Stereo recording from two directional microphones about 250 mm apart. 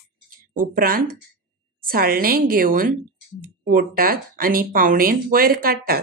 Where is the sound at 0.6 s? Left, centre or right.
Right.